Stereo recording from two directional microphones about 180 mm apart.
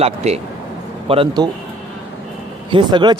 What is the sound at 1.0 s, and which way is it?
Speech, 30° right (ahead or behind).